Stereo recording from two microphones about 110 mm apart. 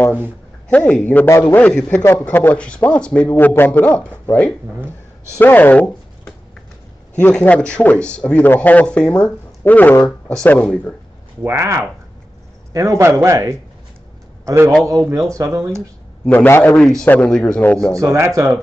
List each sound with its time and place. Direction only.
0.7 s a man's voice: 10° left (ahead or behind)
11.4 s a man's voice: 25° right (ahead or behind)
16.3 s a man's voice: 20° left (ahead or behind)
16.7 s a man's voice: 5° left (ahead or behind)
17.9 s speech: 25° right (ahead or behind)